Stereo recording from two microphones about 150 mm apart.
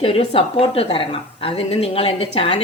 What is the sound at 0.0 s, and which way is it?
A woman's voice, 40° left (ahead or behind).